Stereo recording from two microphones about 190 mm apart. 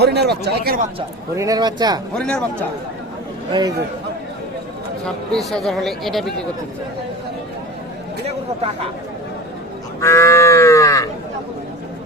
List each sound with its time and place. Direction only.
0.0 s a man's voice: 60° right (ahead or behind)
1.4 s speech: 20° right (ahead or behind)
2.1 s speech: 5° left (ahead or behind)
3.5 s speech: 20° right (ahead or behind)
5.0 s speech: centre (ahead or behind)
10.0 s livestock: 15° left (ahead or behind)